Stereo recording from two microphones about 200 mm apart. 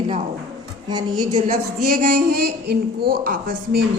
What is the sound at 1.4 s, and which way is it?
Speech, 40° right (ahead or behind).